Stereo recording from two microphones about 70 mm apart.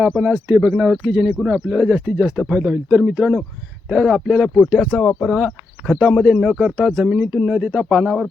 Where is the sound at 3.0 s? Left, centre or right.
Centre.